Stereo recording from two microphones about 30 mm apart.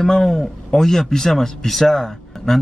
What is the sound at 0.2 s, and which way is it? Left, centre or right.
Speech, centre.